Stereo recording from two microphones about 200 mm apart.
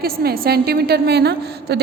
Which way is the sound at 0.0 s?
50° right (ahead or behind).